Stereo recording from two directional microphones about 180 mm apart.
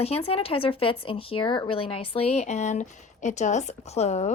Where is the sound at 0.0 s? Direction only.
35° left (ahead or behind).